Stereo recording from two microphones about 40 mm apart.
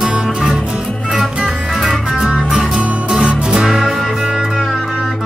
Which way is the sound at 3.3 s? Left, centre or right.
Right.